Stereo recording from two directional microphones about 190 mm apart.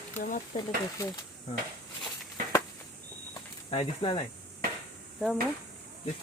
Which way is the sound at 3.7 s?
25° left (ahead or behind).